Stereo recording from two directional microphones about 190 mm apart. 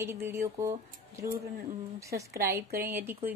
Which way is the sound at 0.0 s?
10° right (ahead or behind).